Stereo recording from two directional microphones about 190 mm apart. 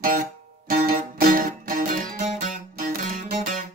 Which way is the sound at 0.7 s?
50° right (ahead or behind).